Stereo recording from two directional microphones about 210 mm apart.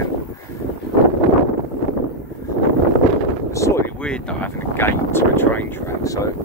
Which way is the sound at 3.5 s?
15° left (ahead or behind).